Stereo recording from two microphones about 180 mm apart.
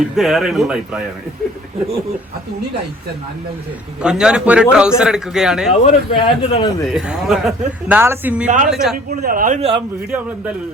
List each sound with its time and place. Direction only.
0.2 s a man's voice: centre (ahead or behind)
4.0 s a man's voice: 5° right (ahead or behind)
5.8 s a man's voice: 30° left (ahead or behind)
6.9 s a man's voice: centre (ahead or behind)
8.4 s a man's voice: 45° right (ahead or behind)
8.7 s a man's voice: centre (ahead or behind)
9.0 s a man's voice: 55° right (ahead or behind)
9.6 s speech: 30° right (ahead or behind)